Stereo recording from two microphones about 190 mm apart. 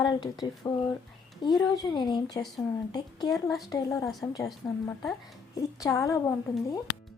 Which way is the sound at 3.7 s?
15° left (ahead or behind).